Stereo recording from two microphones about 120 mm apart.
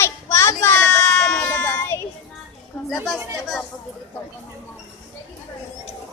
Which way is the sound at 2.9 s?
Centre (ahead or behind).